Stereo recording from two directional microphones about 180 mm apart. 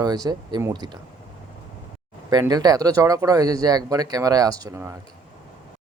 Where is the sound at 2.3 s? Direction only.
20° right (ahead or behind).